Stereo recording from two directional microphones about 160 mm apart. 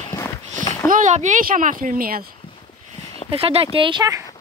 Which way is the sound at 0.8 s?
55° right (ahead or behind).